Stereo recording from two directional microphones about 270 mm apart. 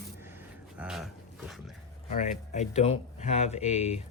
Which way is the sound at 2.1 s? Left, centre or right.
Left.